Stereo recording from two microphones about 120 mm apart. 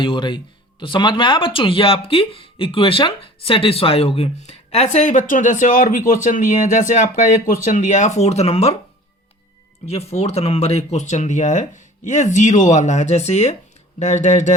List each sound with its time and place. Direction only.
0.0 s speech: 45° left (ahead or behind); by 8.7 s 60° left (ahead or behind)
9.8 s speech: 60° left (ahead or behind)
14.0 s speech: 75° left (ahead or behind)